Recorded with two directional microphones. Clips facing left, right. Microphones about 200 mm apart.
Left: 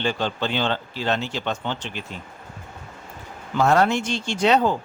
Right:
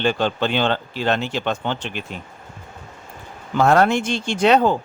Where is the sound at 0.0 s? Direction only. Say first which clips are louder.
Right 4 dB; 60° right (ahead or behind).